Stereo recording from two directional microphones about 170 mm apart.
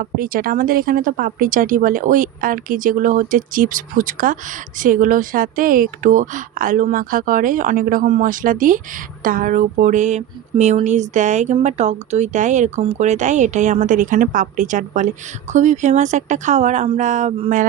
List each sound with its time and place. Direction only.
0.0 s a woman's voice: 60° right (ahead or behind); by 17.5 s 40° right (ahead or behind)